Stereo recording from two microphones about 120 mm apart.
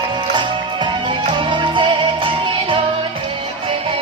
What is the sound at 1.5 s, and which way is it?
Music, 40° right (ahead or behind).